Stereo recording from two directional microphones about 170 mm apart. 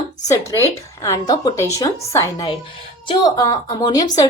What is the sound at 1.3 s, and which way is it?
A woman's voice, 20° left (ahead or behind).